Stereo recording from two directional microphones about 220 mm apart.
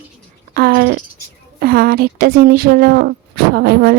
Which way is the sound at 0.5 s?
45° right (ahead or behind).